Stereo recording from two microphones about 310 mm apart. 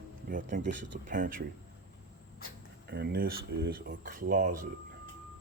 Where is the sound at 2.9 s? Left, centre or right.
Right.